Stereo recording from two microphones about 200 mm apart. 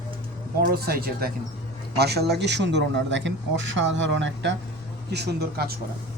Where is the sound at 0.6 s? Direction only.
50° right (ahead or behind).